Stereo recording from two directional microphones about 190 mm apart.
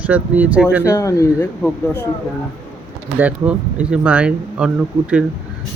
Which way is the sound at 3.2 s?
5° right (ahead or behind).